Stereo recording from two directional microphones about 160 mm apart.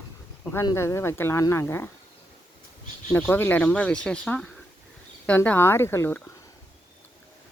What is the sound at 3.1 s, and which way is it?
Speech, 15° left (ahead or behind).